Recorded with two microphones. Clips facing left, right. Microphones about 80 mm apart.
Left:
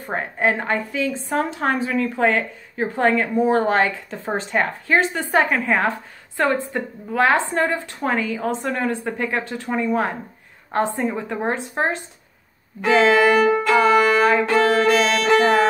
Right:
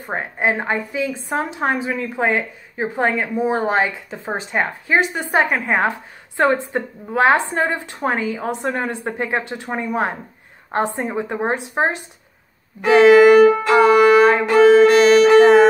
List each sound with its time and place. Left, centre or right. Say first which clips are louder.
0.1 s a woman's voice: even; centre
2.1 s a woman's voice: right 2 dB; centre
13.7 s violin: right 4 dB; centre
14.5 s music: right 6 dB; centre